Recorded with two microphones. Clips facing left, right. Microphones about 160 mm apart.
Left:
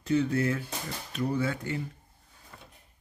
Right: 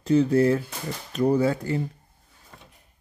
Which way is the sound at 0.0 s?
35° right (ahead or behind).